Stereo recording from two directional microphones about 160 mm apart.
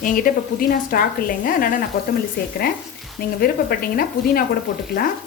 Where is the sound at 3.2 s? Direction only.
65° left (ahead or behind).